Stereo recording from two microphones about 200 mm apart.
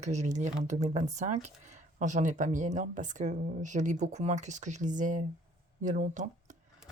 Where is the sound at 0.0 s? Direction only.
35° right (ahead or behind).